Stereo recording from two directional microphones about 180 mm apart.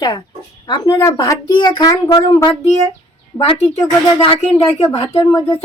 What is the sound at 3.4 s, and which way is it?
Speech, 35° left (ahead or behind).